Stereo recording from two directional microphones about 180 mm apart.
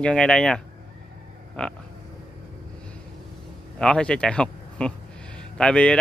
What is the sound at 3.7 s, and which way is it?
Speech, 5° left (ahead or behind).